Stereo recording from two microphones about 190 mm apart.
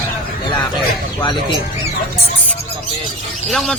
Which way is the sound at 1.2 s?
25° left (ahead or behind).